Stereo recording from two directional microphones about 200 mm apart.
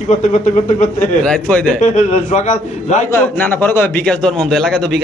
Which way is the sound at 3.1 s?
10° left (ahead or behind).